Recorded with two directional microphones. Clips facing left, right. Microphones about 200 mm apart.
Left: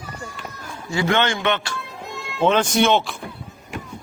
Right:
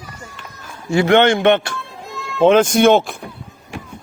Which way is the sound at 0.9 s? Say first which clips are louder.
Right 8 dB; 60° right (ahead or behind).